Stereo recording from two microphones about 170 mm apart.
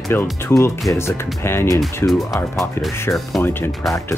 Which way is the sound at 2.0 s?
Centre (ahead or behind).